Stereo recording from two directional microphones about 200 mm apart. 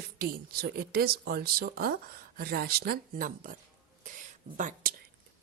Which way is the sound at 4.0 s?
40° right (ahead or behind).